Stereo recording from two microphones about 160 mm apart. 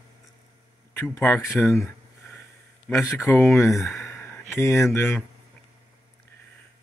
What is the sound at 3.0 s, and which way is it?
Speech, 20° left (ahead or behind).